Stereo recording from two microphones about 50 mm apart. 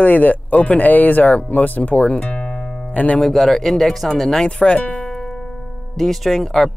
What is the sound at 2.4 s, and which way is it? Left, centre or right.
Music, left.